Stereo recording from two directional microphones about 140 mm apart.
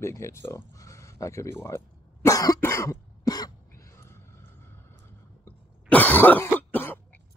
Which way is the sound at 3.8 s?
20° left (ahead or behind).